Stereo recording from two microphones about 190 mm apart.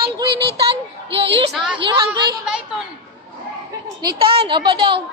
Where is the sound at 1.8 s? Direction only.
25° right (ahead or behind).